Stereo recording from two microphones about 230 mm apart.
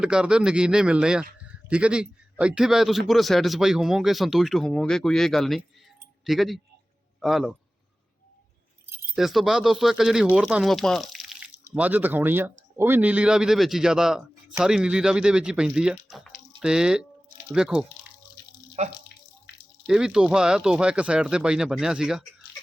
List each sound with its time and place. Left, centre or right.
0.0 s speech: centre
8.9 s speech: centre
18.8 s speech: right
19.9 s speech: centre